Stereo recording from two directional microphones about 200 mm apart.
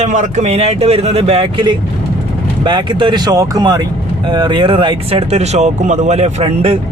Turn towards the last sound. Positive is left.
turn(degrees=-30)  # may be behind; listen again after turning